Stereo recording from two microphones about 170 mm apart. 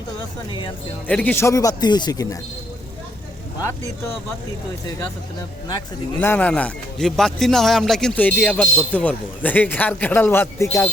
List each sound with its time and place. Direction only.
1.0 s speech: 10° left (ahead or behind)
6.1 s speech: 10° left (ahead or behind)